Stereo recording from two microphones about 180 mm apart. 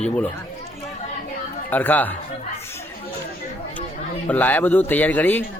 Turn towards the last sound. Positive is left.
turn(degrees=10)  # may be behind; listen again after turning